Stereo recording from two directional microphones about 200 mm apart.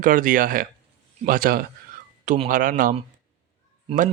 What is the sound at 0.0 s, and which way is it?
Speech, 40° right (ahead or behind).